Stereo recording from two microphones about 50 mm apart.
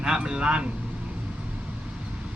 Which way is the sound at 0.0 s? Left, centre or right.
Centre.